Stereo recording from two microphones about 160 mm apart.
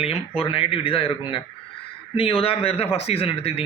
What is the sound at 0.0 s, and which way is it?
A man's voice, 40° left (ahead or behind).